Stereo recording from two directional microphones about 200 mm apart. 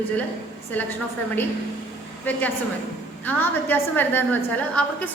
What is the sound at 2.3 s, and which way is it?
A woman's voice, 10° left (ahead or behind).